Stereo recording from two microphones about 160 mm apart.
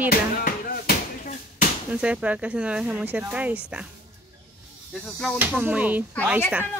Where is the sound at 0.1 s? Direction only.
65° left (ahead or behind).